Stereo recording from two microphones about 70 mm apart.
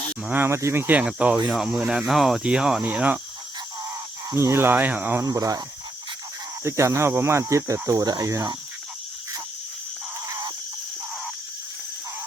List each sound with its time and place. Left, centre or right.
0.4 s speech: right
0.9 s speech: centre
1.5 s cricket: centre
1.8 s speech: centre
2.4 s cricket: centre
2.8 s speech: right
4.4 s speech: right
4.7 s speech: right
5.2 s speech: right
6.7 s speech: right